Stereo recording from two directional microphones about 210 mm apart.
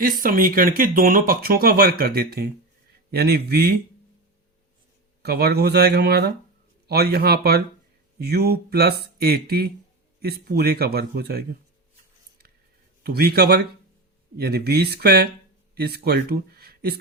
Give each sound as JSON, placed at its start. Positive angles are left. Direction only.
{"t": 0.0, "sound": "speech", "side_deg": -45}
{"t": 5.2, "sound": "speech", "side_deg": -50}
{"t": 13.0, "sound": "speech", "side_deg": -45}